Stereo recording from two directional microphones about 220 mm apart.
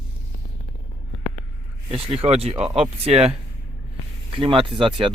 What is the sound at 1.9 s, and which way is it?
Speech, 25° right (ahead or behind).